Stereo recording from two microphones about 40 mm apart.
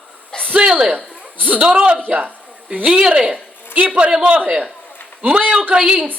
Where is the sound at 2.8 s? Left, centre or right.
Right.